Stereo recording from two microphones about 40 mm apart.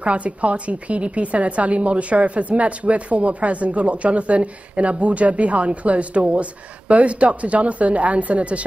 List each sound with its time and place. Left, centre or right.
0.0 s a woman's voice: right